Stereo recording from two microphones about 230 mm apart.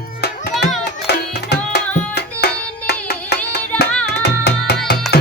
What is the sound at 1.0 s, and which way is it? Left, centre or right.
Music, left.